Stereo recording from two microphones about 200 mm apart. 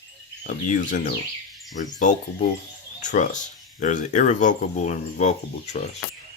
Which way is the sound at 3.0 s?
40° left (ahead or behind).